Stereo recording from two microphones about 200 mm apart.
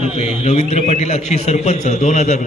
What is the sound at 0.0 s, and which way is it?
A man's voice, 30° left (ahead or behind).